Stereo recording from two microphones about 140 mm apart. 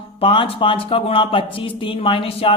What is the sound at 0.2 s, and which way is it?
A woman's voice, 40° left (ahead or behind).